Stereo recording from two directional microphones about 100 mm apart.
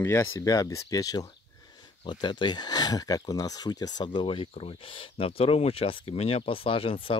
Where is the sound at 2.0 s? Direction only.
50° left (ahead or behind).